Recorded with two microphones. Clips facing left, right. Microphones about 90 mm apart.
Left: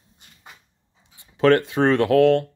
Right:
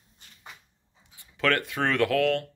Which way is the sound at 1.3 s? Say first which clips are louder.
Left 9 dB; 25° left (ahead or behind).